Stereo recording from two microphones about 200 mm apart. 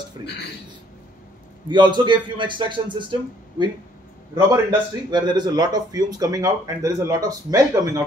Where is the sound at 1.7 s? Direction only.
20° right (ahead or behind).